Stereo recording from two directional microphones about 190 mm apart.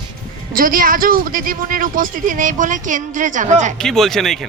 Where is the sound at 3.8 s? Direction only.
Centre (ahead or behind).